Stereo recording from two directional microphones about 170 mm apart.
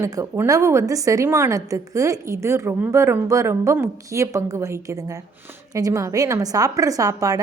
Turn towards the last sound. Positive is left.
turn(degrees=-20)  # may be behind; listen again after turning